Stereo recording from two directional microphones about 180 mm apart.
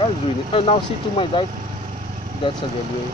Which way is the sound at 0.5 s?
30° left (ahead or behind).